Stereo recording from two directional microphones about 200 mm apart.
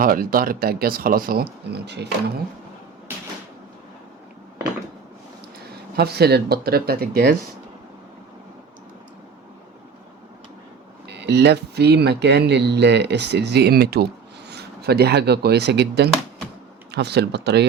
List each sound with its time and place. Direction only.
0.0 s speech: 45° right (ahead or behind)
6.0 s speech: 55° right (ahead or behind)
11.1 s speech: 60° right (ahead or behind)